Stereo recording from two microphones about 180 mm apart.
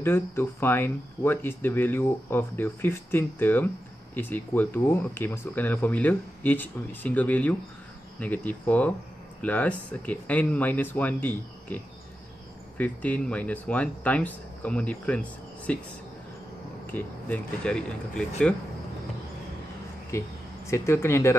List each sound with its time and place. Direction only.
0.0 s speech: 15° left (ahead or behind)
16.8 s speech: 10° left (ahead or behind)
20.1 s speech: 15° left (ahead or behind)